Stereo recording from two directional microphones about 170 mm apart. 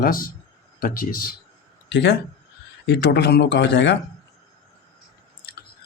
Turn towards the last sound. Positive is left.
turn(degrees=90)